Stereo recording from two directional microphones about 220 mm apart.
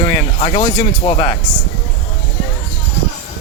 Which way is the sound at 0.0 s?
25° left (ahead or behind).